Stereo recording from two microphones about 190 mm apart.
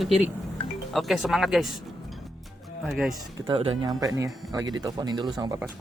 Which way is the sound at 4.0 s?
15° right (ahead or behind).